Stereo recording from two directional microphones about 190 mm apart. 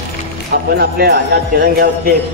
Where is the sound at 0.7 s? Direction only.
55° right (ahead or behind).